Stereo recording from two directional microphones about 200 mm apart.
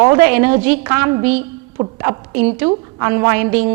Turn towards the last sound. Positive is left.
turn(degrees=-10)  # may be behind; listen again after turning